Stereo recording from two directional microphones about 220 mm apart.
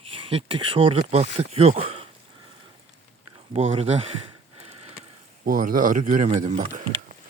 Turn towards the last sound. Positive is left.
turn(degrees=-35)  # may be behind; listen again after turning